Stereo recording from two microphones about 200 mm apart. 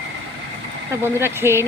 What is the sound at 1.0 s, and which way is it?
Speech, 10° right (ahead or behind).